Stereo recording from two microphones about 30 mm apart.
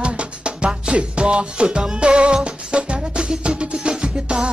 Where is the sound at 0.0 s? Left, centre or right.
Right.